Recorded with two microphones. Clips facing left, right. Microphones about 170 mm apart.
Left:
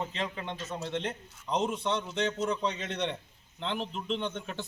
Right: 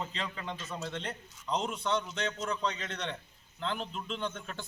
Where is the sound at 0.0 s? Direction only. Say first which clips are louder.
Left 3 dB; 20° left (ahead or behind).